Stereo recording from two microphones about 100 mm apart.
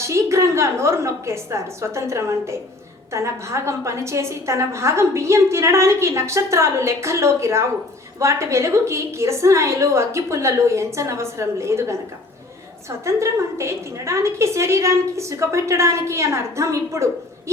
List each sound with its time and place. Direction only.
0.0 s a woman's voice: 30° right (ahead or behind)
13.1 s a woman's voice: 30° right (ahead or behind)